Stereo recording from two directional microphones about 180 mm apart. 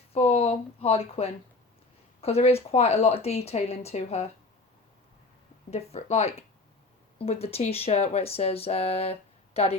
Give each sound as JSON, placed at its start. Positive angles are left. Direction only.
{"t": 0.1, "sound": "speech", "side_deg": 35}
{"t": 5.7, "sound": "speech", "side_deg": 35}